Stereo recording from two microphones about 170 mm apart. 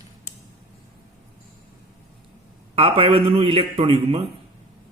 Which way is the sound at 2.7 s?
35° right (ahead or behind).